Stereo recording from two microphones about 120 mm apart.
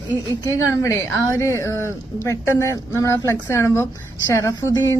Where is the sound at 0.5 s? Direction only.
25° left (ahead or behind).